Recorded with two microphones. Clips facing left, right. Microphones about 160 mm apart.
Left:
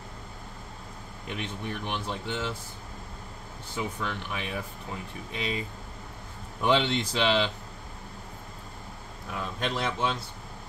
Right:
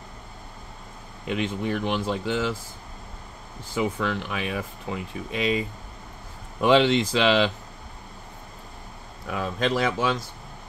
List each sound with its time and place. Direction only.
1.2 s speech: 90° right
3.7 s speech: 90° right
6.6 s speech: 90° right
9.3 s speech: 90° right